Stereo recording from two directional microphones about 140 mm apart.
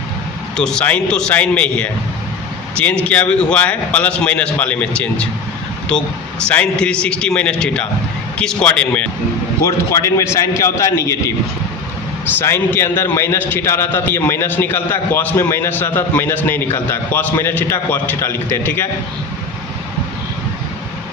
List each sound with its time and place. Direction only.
0.5 s a man's voice: 5° left (ahead or behind)
9.6 s a man's voice: 20° left (ahead or behind)